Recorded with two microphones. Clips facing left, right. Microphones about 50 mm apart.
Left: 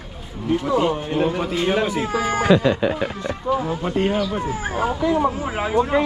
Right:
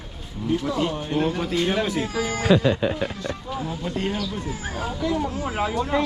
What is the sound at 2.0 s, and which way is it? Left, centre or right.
Speech, left.